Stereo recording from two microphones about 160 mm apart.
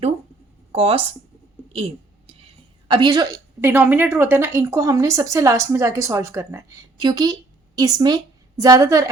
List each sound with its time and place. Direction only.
0.7 s speech: 35° right (ahead or behind)
1.7 s a sound: 35° right (ahead or behind)
2.8 s a woman's voice: 30° right (ahead or behind)